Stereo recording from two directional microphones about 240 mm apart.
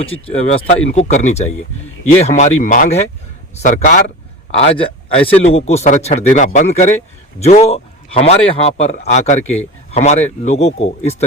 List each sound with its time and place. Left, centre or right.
0.0 s a man's voice: left